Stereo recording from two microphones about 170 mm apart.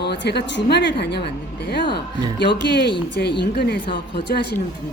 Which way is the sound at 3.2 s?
70° left (ahead or behind).